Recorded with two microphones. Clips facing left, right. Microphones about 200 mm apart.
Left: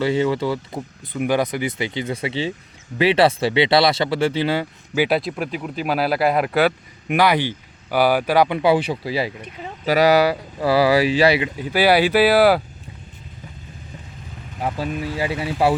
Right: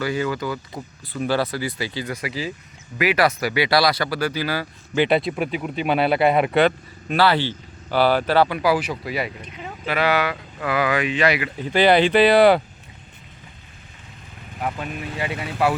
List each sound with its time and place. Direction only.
0.0 s speech: 25° left (ahead or behind)
1.1 s speech: 15° left (ahead or behind)
4.9 s speech: 5° left (ahead or behind)
7.1 s speech: 15° left (ahead or behind)
9.8 s speech: 40° left (ahead or behind)
11.4 s speech: 10° left (ahead or behind)
14.6 s speech: 30° left (ahead or behind)